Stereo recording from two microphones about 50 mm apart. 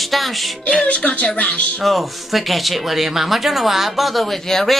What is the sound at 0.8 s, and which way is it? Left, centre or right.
Speech, left.